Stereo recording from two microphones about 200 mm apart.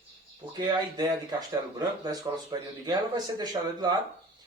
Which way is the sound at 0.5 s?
20° right (ahead or behind).